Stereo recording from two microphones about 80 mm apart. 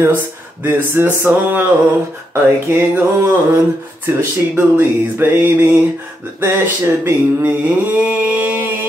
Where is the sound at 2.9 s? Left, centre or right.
Right.